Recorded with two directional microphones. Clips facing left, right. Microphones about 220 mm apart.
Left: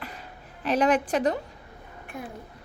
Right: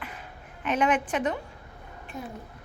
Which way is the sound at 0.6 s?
35° left (ahead or behind).